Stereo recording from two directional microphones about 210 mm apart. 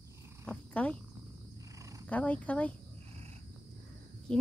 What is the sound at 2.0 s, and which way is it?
Speech, 5° left (ahead or behind).